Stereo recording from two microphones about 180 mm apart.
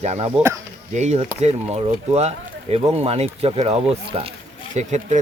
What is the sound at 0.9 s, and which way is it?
Speech, 40° right (ahead or behind).